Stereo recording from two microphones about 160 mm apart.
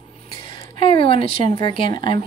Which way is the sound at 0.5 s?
35° left (ahead or behind).